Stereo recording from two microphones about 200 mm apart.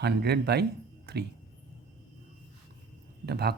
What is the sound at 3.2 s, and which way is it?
Speech, 55° right (ahead or behind).